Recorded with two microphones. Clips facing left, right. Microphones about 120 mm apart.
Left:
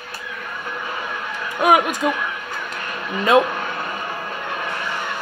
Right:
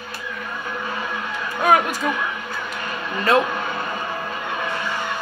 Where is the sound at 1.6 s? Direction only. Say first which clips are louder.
Left 2 dB; 15° left (ahead or behind).